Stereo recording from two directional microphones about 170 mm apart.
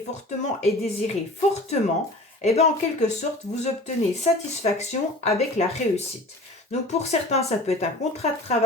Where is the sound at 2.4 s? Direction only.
40° left (ahead or behind).